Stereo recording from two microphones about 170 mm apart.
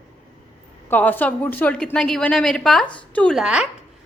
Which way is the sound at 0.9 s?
10° left (ahead or behind).